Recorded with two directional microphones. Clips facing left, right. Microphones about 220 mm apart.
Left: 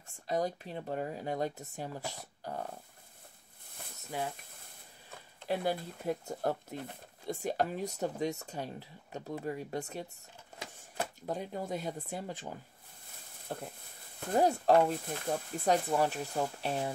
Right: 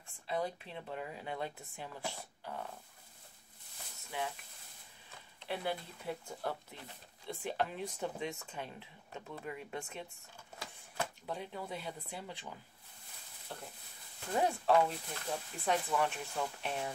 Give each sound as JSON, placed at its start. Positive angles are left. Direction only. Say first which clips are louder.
{"t": 0.3, "sound": "speech", "louder": "left 4 dB", "side_deg": 40}
{"t": 4.1, "sound": "speech", "louder": "left 3 dB", "side_deg": 40}
{"t": 5.4, "sound": "speech", "louder": "left 6 dB", "side_deg": 40}
{"t": 11.2, "sound": "speech", "louder": "left 5 dB", "side_deg": 45}
{"t": 13.5, "sound": "speech", "louder": "left 7 dB", "side_deg": 45}